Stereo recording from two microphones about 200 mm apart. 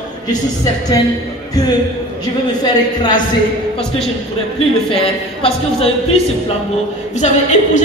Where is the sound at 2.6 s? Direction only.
20° left (ahead or behind).